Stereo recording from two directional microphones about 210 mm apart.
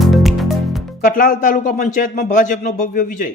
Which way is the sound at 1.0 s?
40° left (ahead or behind).